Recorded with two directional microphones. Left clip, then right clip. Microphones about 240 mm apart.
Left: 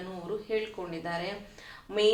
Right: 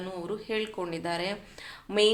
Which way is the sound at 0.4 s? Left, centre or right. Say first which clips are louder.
Right 1 dB; right.